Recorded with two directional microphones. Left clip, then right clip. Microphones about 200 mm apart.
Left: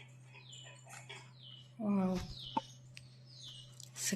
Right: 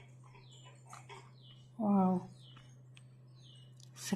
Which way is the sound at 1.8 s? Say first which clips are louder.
Right 5 dB; 40° right (ahead or behind).